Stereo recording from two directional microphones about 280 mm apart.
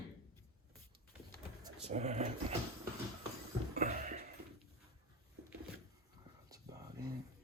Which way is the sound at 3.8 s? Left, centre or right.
Right.